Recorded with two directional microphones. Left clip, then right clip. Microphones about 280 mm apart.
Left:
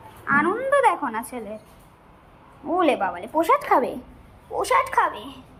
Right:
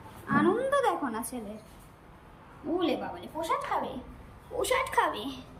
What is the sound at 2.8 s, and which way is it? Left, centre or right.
Speech, left.